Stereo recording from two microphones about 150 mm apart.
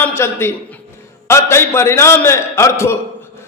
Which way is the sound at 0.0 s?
15° left (ahead or behind).